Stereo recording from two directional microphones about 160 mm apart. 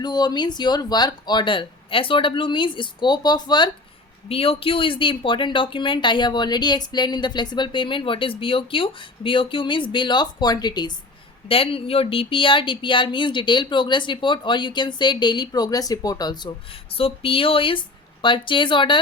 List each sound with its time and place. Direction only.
0.0 s speech: 25° left (ahead or behind)